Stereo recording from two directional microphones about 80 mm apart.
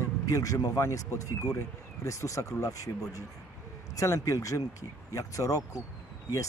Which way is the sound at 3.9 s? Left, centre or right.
Left.